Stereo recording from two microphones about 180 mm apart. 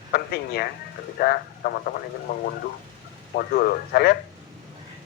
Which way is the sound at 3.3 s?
60° left (ahead or behind).